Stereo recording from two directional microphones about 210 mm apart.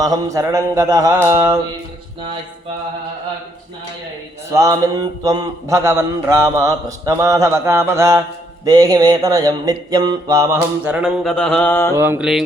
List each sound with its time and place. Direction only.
0.0 s a man's voice: 15° right (ahead or behind)
4.5 s a man's voice: 15° right (ahead or behind); by 11.9 s 10° left (ahead or behind)
11.9 s a man's voice: 10° right (ahead or behind)